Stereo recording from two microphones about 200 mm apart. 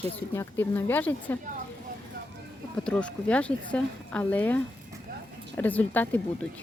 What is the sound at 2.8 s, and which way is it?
Speech, 5° left (ahead or behind).